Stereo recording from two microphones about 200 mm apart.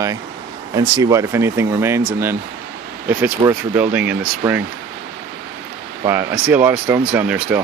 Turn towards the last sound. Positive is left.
turn(degrees=-5)  # may be behind; listen again after turning